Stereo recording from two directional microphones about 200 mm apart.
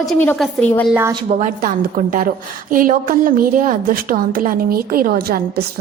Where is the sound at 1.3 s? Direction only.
35° right (ahead or behind).